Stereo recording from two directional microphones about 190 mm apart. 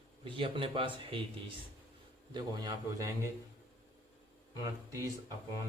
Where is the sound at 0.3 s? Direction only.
30° right (ahead or behind).